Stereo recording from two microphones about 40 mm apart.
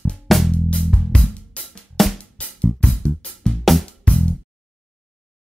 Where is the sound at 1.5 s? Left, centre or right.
Left.